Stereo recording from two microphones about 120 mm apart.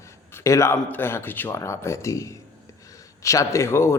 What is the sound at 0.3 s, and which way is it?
A man's voice, 20° left (ahead or behind).